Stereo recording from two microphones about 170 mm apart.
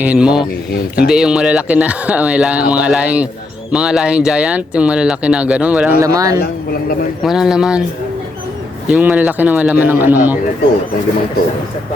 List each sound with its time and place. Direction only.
0.0 s speech: 5° right (ahead or behind)
6.0 s speech: 20° right (ahead or behind)
7.2 s speech: centre (ahead or behind)
8.9 s speech: 10° right (ahead or behind)